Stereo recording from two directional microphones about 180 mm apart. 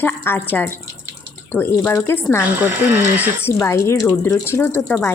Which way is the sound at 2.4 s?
10° right (ahead or behind).